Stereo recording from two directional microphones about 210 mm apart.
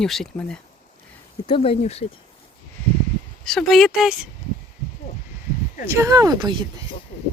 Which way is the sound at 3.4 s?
Centre (ahead or behind).